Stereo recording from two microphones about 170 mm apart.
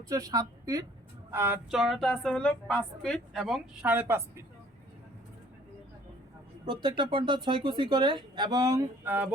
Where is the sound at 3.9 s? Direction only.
15° right (ahead or behind).